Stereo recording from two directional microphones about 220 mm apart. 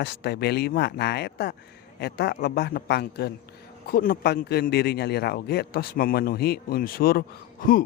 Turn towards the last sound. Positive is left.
turn(degrees=40)  # may be behind; listen again after turning